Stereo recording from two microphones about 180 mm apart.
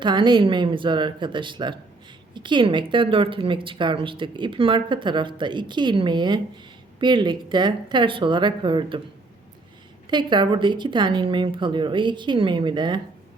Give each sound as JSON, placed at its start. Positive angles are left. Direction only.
{"t": 0.0, "sound": "a woman's voice", "side_deg": -25}
{"t": 10.1, "sound": "a woman's voice", "side_deg": -25}